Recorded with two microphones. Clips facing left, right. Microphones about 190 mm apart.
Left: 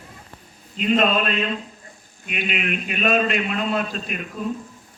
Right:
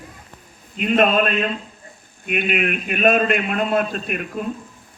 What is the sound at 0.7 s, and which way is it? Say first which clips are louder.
A man's voice: right 2 dB; 55° right (ahead or behind).